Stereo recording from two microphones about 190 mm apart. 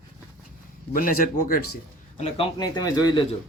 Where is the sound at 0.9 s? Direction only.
45° left (ahead or behind).